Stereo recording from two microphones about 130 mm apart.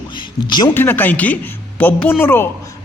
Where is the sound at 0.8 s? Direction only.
15° left (ahead or behind).